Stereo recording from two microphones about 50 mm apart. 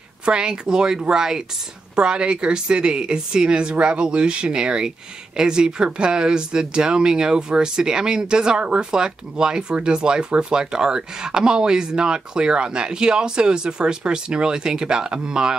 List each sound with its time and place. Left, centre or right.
0.2 s speech: centre